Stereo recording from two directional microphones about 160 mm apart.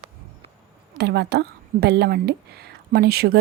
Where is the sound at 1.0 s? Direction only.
90° right.